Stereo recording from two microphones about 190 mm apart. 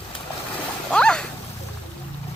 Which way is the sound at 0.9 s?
5° left (ahead or behind).